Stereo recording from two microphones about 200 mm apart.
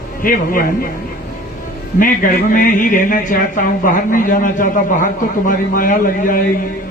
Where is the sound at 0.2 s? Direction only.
45° left (ahead or behind).